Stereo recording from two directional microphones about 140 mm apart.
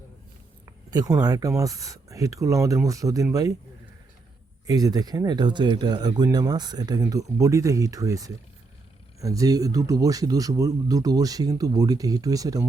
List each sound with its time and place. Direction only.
0.6 s speech: 25° right (ahead or behind)
4.6 s speech: 25° right (ahead or behind)